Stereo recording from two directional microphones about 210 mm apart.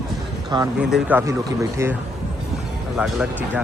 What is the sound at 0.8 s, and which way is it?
Speech, 5° right (ahead or behind).